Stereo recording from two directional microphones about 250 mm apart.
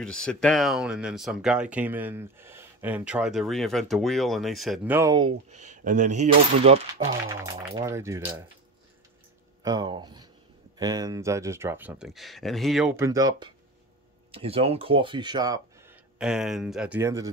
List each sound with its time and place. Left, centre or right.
0.0 s speech: centre
5.5 s speech: right
7.2 s speech: centre
9.6 s speech: centre